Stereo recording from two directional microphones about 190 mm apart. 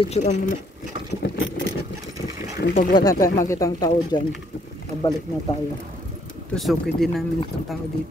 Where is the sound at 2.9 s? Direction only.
20° left (ahead or behind).